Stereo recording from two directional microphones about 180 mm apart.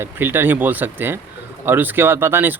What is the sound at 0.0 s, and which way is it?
Speech, 10° right (ahead or behind).